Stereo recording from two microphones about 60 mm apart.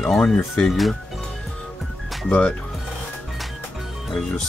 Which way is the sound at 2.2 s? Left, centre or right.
Left.